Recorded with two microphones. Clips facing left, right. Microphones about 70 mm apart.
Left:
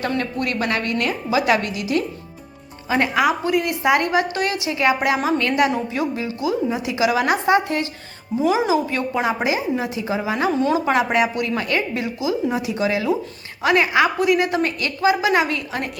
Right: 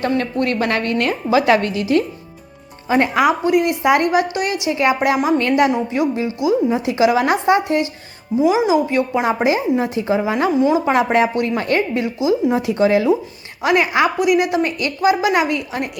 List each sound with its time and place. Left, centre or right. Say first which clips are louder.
0.0 s a woman's voice: right 4 dB; right
2.9 s a woman's voice: right 3 dB; right
8.4 s a woman's voice: right 4 dB; centre
9.2 s a woman's voice: right 4 dB; right
10.5 s a woman's voice: right 5 dB; centre
10.8 s a woman's voice: right 3 dB; right
12.6 s a woman's voice: right 6 dB; right
13.6 s a woman's voice: right 1 dB; right